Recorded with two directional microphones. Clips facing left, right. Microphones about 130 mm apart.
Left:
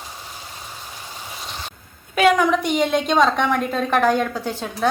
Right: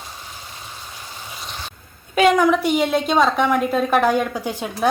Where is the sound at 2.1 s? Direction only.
Centre (ahead or behind).